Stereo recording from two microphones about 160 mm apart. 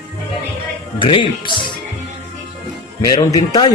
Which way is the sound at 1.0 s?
30° left (ahead or behind).